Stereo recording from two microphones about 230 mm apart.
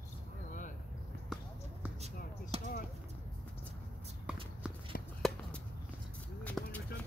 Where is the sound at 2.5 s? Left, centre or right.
Right.